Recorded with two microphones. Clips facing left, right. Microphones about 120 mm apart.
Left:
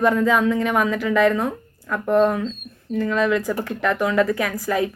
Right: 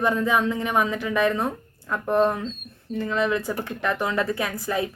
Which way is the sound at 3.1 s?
25° right (ahead or behind).